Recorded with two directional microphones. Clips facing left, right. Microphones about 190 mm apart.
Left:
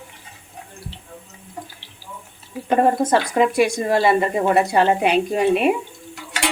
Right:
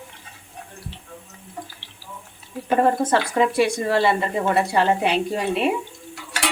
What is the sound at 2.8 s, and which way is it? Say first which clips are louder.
Speech: left 2 dB; 15° left (ahead or behind).